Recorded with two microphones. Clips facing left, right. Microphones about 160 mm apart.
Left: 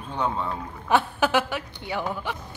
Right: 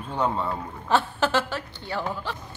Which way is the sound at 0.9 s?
15° left (ahead or behind).